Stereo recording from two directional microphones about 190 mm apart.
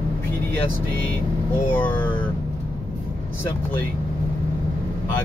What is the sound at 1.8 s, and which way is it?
Speech, 10° left (ahead or behind).